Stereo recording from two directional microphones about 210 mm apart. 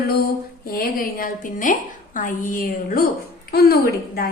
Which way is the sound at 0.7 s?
45° left (ahead or behind).